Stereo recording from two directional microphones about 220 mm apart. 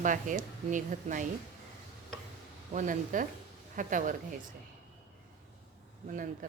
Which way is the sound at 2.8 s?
35° right (ahead or behind).